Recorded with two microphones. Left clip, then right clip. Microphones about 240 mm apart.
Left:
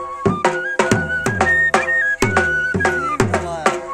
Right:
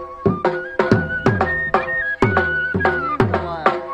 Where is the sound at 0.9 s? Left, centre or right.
Left.